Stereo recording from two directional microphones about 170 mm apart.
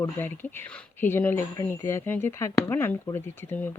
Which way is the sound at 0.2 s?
10° left (ahead or behind).